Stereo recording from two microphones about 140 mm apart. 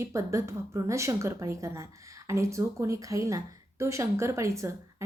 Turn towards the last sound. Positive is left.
turn(degrees=-20)  # may be behind; listen again after turning